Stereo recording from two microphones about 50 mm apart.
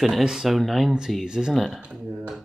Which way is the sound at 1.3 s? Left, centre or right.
Centre.